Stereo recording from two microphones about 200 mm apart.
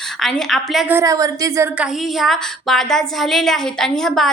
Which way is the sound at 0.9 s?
15° right (ahead or behind).